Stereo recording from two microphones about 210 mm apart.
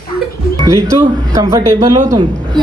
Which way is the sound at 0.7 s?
15° right (ahead or behind).